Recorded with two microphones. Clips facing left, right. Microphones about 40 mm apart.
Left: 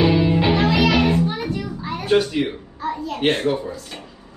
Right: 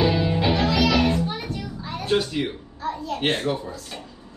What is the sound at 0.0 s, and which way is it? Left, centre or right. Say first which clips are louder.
Music: left 4 dB; centre.